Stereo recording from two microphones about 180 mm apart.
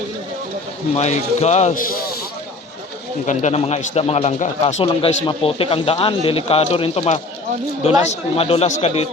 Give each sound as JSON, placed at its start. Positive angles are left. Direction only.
{"t": 0.9, "sound": "speech", "side_deg": 35}
{"t": 3.2, "sound": "speech", "side_deg": 35}